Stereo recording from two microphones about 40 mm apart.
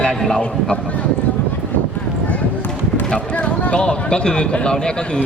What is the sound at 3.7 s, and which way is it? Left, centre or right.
Speech, left.